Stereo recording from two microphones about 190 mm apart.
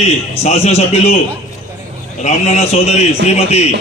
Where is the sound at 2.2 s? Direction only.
35° left (ahead or behind).